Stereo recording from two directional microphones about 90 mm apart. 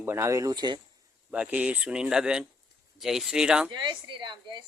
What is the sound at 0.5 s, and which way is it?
Speech, 55° right (ahead or behind).